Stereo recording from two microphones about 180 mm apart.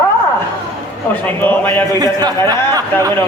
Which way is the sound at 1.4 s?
10° left (ahead or behind).